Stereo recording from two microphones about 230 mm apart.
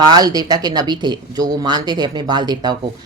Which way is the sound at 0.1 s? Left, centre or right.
Centre.